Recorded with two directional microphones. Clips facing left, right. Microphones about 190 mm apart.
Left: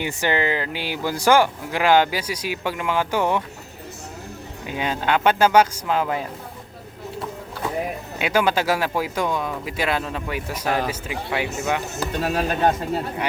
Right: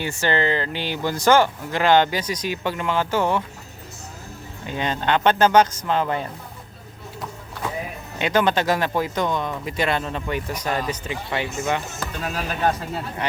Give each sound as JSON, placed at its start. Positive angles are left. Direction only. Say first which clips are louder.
{"t": 0.0, "sound": "speech", "louder": "even", "side_deg": 15}
{"t": 4.6, "sound": "speech", "louder": "even", "side_deg": 5}
{"t": 8.2, "sound": "speech", "louder": "right 1 dB", "side_deg": 10}
{"t": 10.7, "sound": "speech", "louder": "left 2 dB", "side_deg": 70}
{"t": 11.1, "sound": "speech", "louder": "even", "side_deg": 5}
{"t": 11.9, "sound": "speech", "louder": "left 5 dB", "side_deg": 35}